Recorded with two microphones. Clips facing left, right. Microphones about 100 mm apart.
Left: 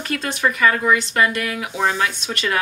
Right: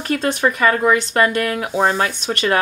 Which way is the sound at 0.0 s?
45° right (ahead or behind).